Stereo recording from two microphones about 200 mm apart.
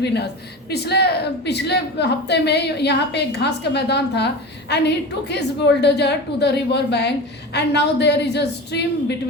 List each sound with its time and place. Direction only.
0.0 s a woman's voice: 55° left (ahead or behind)